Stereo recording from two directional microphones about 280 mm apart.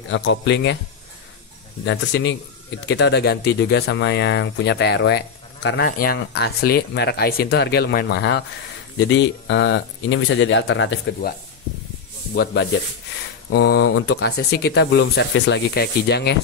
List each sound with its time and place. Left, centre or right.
0.1 s speech: left
1.9 s speech: left
13.5 s speech: left